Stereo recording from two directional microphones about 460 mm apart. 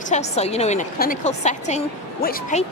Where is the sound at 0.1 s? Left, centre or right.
Centre.